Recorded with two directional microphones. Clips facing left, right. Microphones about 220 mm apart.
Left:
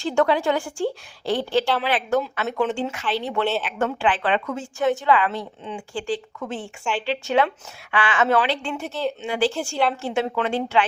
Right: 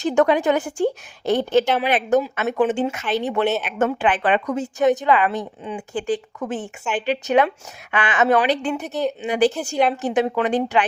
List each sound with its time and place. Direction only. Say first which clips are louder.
0.0 s a woman's voice: right 3 dB; 20° right (ahead or behind)